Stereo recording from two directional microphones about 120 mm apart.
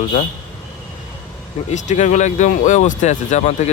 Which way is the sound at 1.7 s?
85° left.